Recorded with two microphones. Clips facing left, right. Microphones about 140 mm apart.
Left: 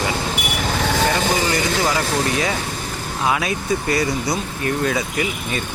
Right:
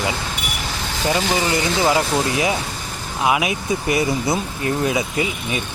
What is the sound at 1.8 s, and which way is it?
Speech, 20° right (ahead or behind).